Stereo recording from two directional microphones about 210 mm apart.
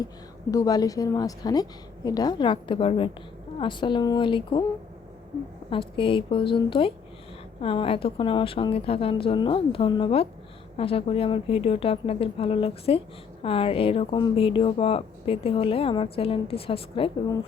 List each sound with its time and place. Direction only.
0.5 s a woman's voice: 15° left (ahead or behind)
5.7 s speech: 25° left (ahead or behind)